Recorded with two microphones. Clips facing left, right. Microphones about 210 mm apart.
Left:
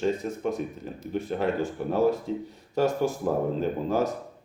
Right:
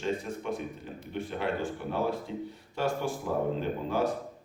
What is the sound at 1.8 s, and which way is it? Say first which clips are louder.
Speech: left 10 dB; 40° left (ahead or behind).